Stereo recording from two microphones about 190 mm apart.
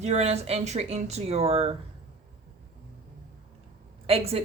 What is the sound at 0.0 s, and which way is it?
A woman's voice, 35° right (ahead or behind).